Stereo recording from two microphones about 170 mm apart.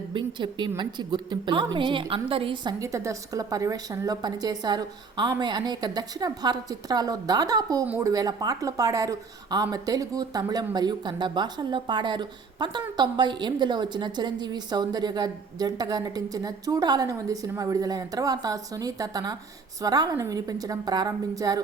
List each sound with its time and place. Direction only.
0.1 s a woman's voice: 25° right (ahead or behind)
2.8 s a woman's voice: 20° right (ahead or behind)